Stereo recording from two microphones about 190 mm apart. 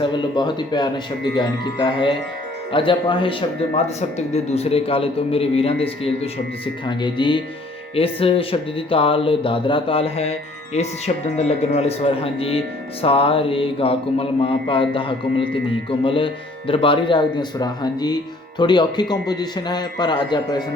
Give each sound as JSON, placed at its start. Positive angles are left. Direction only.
{"t": 0.0, "sound": "a man's voice", "side_deg": 25}
{"t": 6.8, "sound": "speech", "side_deg": 25}